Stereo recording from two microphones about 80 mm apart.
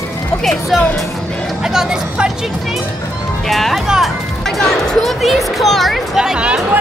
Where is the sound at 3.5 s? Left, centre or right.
Centre.